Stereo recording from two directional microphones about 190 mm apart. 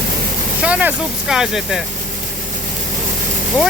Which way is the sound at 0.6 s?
5° right (ahead or behind).